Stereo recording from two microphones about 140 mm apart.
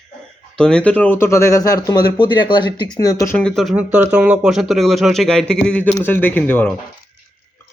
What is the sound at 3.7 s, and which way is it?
Speech, 15° right (ahead or behind).